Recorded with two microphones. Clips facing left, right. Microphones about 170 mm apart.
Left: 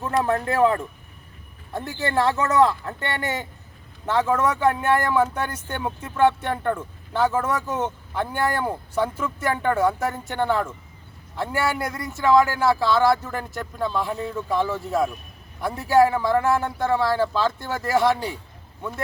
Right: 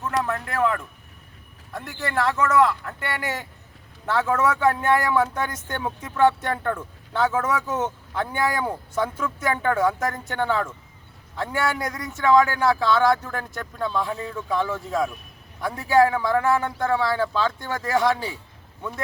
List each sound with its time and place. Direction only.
0.2 s speech: 35° left (ahead or behind)
4.0 s speech: 15° left (ahead or behind)